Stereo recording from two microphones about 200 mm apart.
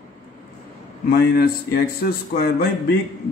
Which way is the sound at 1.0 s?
50° left (ahead or behind).